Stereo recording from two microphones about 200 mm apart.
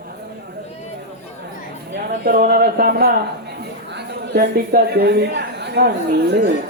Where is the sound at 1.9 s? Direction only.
50° right (ahead or behind).